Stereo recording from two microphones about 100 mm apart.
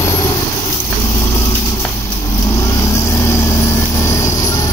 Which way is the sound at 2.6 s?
30° left (ahead or behind).